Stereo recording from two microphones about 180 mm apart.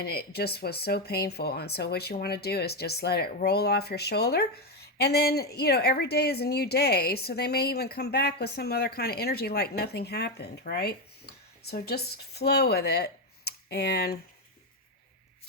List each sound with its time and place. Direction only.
0.0 s speech: 60° left (ahead or behind)